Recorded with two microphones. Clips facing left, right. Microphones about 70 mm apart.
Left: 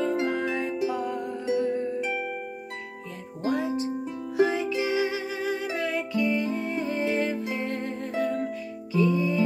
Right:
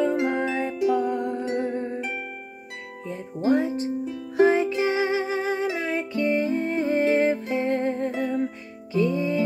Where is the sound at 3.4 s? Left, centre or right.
Right.